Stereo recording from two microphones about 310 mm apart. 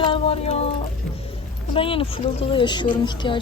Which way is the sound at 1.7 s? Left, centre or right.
Centre.